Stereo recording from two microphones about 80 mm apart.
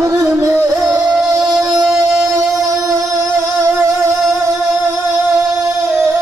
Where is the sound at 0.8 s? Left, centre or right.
Right.